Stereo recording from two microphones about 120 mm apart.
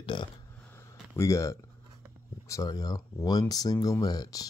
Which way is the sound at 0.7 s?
20° left (ahead or behind).